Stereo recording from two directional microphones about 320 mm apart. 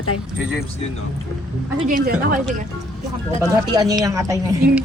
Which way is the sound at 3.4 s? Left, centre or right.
Centre.